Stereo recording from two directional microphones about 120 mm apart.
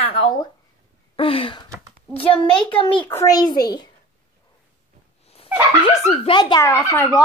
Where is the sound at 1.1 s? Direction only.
50° left (ahead or behind).